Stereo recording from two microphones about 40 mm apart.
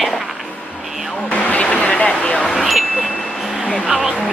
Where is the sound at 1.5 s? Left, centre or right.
Left.